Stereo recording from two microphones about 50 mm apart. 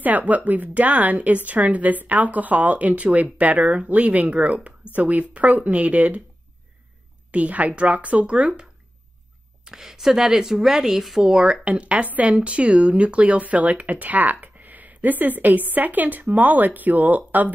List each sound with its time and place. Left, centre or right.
0.0 s speech: right
7.2 s speech: right
9.7 s speech: centre
11.6 s speech: right